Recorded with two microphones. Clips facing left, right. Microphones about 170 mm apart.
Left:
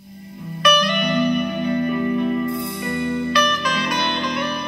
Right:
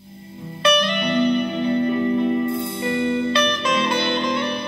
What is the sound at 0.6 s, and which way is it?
Music, 25° right (ahead or behind).